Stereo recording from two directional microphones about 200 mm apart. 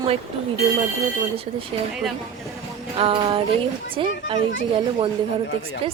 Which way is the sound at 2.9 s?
30° right (ahead or behind).